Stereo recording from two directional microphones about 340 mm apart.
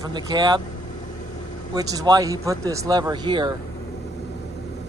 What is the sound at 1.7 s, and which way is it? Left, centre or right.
Speech, centre.